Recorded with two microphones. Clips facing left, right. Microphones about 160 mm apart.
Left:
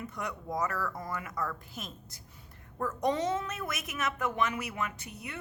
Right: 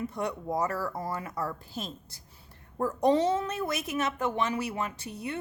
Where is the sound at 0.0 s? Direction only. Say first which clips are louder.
Right 6 dB; 30° right (ahead or behind).